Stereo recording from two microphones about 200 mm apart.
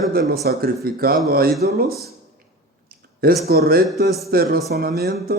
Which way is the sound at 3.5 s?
50° right (ahead or behind).